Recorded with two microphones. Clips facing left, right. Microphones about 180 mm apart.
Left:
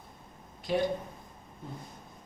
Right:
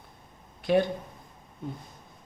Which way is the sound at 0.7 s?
65° right (ahead or behind).